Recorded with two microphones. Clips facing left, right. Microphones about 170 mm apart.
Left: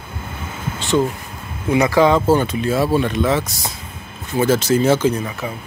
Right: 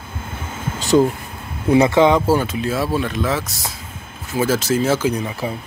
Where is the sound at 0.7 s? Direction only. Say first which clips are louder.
Right 3 dB; 40° right (ahead or behind).